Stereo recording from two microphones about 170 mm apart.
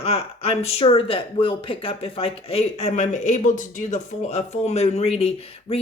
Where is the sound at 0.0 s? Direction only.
35° left (ahead or behind).